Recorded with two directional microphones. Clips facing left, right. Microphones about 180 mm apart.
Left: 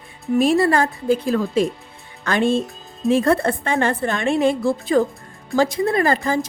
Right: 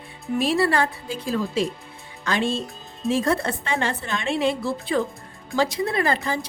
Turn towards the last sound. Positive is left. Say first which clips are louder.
# left 5 dB
turn(degrees=45)  # may be behind; listen again after turning